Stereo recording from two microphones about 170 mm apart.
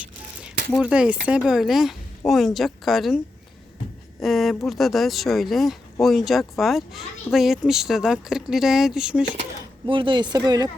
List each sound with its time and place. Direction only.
0.8 s speech: 5° right (ahead or behind)
4.2 s speech: centre (ahead or behind)
9.8 s speech: 30° right (ahead or behind)